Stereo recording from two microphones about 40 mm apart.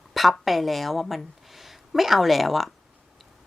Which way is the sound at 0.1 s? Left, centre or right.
Centre.